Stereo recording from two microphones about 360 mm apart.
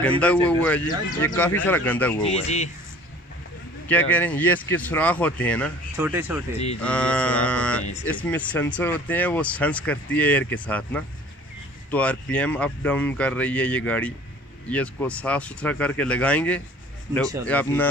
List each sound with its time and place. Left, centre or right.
0.0 s speech: centre
2.2 s speech: centre
3.8 s speech: centre
5.9 s speech: centre